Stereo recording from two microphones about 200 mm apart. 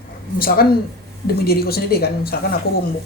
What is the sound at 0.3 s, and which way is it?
Speech, 45° left (ahead or behind).